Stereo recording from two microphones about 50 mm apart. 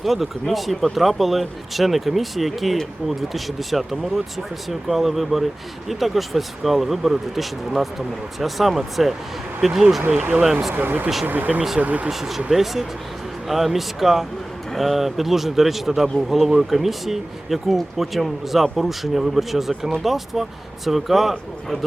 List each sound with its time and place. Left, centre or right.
0.0 s speech: centre
10.8 s speech: right
12.0 s speech: centre